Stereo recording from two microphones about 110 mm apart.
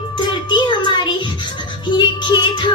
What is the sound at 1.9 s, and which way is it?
Music, 45° left (ahead or behind).